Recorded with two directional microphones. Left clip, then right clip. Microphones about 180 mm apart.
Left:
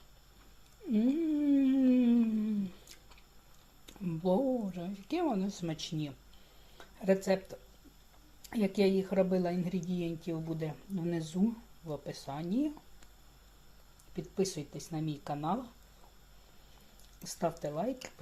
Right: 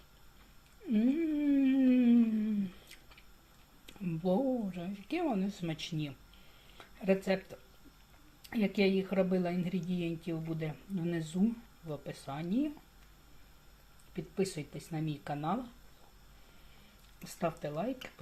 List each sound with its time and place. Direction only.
0.9 s a sound: 5° left (ahead or behind)
3.8 s speech: 5° left (ahead or behind)
6.7 s a sound: 5° left (ahead or behind)
7.3 s speech: 5° left (ahead or behind)
14.2 s speech: 5° left (ahead or behind)
17.2 s speech: 5° left (ahead or behind)